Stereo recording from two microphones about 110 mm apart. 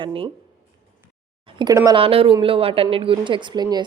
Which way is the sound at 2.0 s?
55° right (ahead or behind).